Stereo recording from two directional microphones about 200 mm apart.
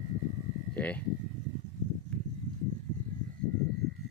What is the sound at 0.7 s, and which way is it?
Speech, 5° left (ahead or behind).